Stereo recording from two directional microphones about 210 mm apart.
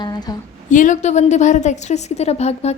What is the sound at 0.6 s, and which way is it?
A woman's voice, 35° left (ahead or behind).